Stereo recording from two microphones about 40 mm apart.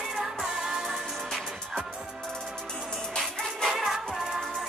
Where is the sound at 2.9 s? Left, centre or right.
Centre.